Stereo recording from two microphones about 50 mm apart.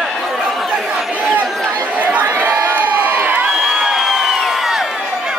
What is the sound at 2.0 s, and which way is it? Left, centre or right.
Crowd, right.